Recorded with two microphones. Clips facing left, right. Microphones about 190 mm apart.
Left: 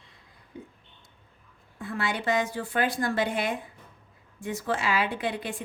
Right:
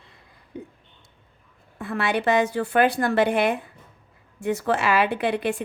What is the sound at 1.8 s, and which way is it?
A woman's voice, 70° right (ahead or behind).